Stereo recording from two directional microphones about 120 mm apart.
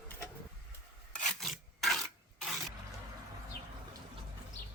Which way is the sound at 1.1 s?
Centre (ahead or behind).